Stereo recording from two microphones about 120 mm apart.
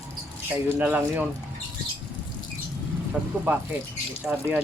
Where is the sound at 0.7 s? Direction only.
15° right (ahead or behind).